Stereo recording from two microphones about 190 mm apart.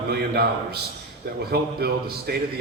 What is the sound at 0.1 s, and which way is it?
A man's voice, 55° right (ahead or behind).